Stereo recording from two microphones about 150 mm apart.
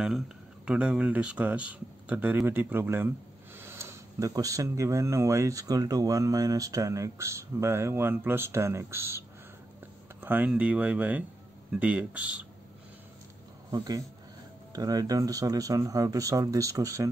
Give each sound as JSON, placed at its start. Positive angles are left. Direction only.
{"t": 0.7, "sound": "speech", "side_deg": -5}
{"t": 10.2, "sound": "speech", "side_deg": -10}
{"t": 13.7, "sound": "speech", "side_deg": -25}